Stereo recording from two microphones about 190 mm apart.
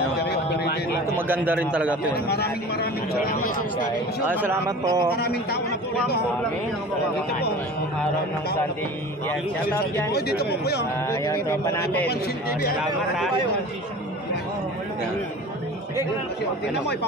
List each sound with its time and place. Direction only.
0.2 s a sound: 55° left (ahead or behind)
1.1 s a man's voice: 10° right (ahead or behind)
2.1 s speech: 55° left (ahead or behind)
4.3 s a man's voice: 10° right (ahead or behind)
5.1 s speech: 60° left (ahead or behind)
10.1 s speech: 55° left (ahead or behind)
11.1 s speech: 15° left (ahead or behind)
12.1 s speech: 55° left (ahead or behind)